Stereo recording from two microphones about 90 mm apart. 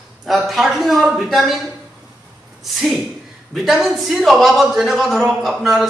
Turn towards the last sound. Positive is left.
turn(degrees=0)  # may be behind; listen again after turning